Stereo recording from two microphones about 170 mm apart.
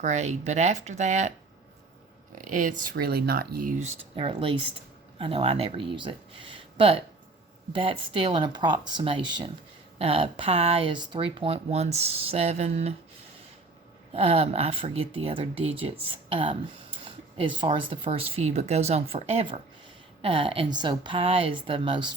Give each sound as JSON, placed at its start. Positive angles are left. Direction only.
{"t": 0.0, "sound": "speech", "side_deg": -45}
{"t": 2.4, "sound": "speech", "side_deg": -50}
{"t": 2.9, "sound": "speech", "side_deg": -65}
{"t": 14.1, "sound": "speech", "side_deg": -35}